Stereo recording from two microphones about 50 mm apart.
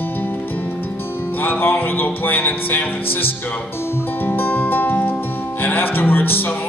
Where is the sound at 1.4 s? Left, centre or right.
Left.